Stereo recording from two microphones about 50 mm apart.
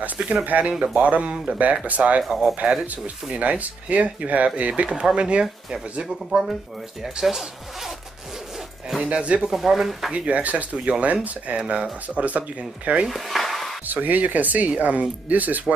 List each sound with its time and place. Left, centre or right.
0.2 s speech: right
1.3 s speech: centre
1.9 s speech: right
2.4 s speech: centre
2.8 s speech: right
7.2 s speech: centre
9.0 s speech: right
9.5 s speech: centre
10.1 s speech: right
13.1 s dishes: centre
13.8 s speech: right